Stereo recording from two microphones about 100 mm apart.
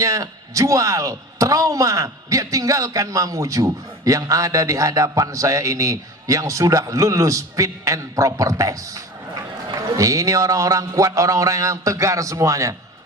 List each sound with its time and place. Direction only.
0.0 s a man's voice: 35° right (ahead or behind)